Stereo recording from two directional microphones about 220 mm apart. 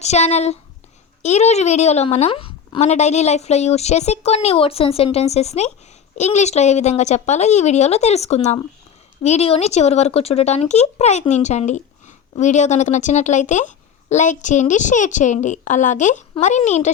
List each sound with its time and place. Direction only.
0.0 s a woman's voice: 30° left (ahead or behind)